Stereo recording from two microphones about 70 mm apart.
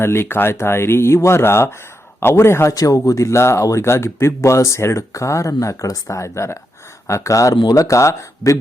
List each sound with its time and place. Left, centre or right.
0.0 s speech: left
2.7 s speech: left
7.5 s speech: left
7.8 s speech: left